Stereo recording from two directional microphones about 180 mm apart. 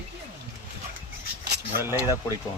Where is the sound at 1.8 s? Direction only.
15° right (ahead or behind).